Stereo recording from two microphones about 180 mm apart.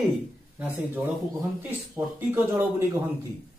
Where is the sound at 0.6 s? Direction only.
10° right (ahead or behind).